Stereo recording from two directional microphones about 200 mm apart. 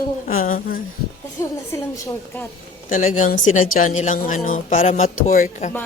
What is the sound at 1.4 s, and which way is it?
Speech, 15° left (ahead or behind).